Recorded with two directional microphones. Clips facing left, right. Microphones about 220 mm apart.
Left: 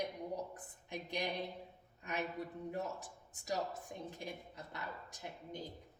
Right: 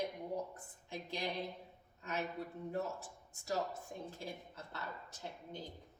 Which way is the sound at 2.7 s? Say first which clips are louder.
Right 4 dB; 15° left (ahead or behind).